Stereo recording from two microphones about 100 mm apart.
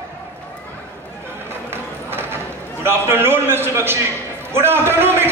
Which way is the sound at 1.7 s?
25° right (ahead or behind).